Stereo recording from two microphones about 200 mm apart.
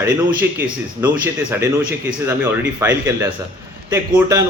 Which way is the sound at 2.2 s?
10° right (ahead or behind).